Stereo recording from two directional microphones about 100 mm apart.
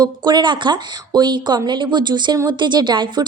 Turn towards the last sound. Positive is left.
turn(degrees=-50)  # may be behind; listen again after turning